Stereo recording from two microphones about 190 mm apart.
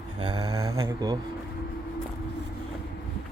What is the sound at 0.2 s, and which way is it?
Speech, 20° right (ahead or behind).